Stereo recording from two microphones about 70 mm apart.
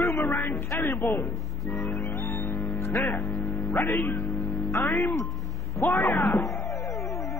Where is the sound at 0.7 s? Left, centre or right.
Left.